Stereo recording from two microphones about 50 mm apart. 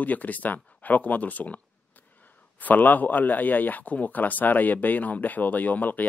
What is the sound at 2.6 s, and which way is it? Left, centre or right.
Speech, left.